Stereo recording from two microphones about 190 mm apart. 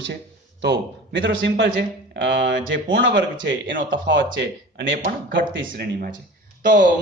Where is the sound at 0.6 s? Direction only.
65° right (ahead or behind).